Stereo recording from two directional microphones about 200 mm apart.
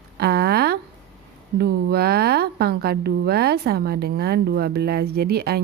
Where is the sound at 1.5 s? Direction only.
50° right (ahead or behind).